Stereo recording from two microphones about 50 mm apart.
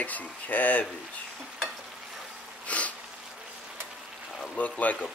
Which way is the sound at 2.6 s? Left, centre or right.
Left.